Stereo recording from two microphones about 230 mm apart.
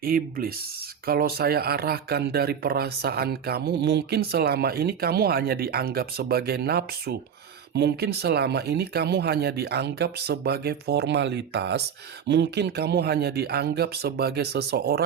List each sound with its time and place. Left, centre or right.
0.0 s speech: right